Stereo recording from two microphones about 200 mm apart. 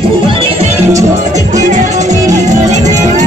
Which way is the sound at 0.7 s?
15° right (ahead or behind).